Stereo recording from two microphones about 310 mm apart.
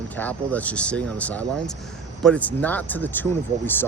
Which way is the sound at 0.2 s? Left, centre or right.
Centre.